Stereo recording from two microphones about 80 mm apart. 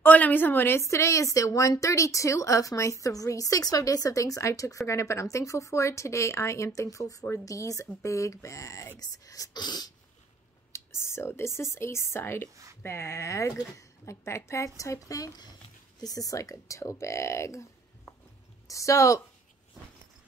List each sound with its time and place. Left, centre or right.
0.0 s a woman's voice: left
11.0 s a woman's voice: left
18.7 s a woman's voice: left